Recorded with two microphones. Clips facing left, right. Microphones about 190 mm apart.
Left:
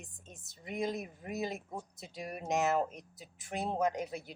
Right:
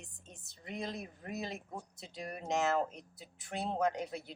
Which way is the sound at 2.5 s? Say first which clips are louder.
Left 1 dB; 15° left (ahead or behind).